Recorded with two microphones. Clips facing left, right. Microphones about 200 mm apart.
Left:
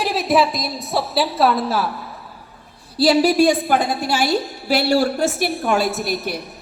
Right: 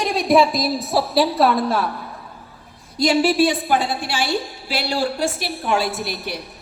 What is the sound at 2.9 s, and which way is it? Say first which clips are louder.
A woman's voice: left 2 dB; 35° left (ahead or behind).